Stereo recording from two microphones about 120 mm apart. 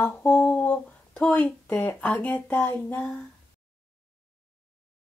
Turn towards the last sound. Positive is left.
turn(degrees=10)  # may be behind; listen again after turning